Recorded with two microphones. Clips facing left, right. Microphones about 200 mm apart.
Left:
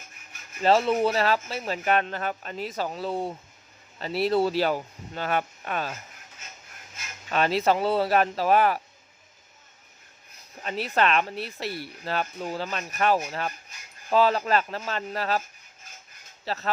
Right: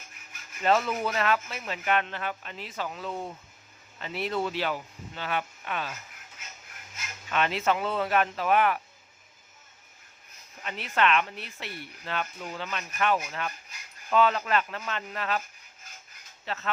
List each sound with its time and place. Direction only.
0.6 s speech: 30° left (ahead or behind)
7.3 s speech: 35° left (ahead or behind)
10.6 s speech: 35° left (ahead or behind)
16.5 s speech: 35° left (ahead or behind)